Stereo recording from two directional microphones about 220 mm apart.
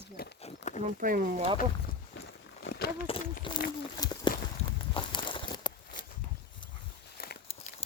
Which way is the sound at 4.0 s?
20° left (ahead or behind).